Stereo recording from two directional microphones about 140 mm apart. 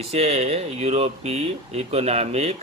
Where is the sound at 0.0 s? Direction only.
50° right (ahead or behind).